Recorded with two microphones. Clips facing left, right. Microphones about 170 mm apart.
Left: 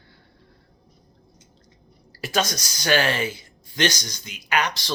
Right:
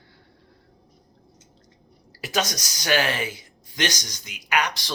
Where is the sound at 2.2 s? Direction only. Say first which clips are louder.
Left 2 dB; 15° right (ahead or behind).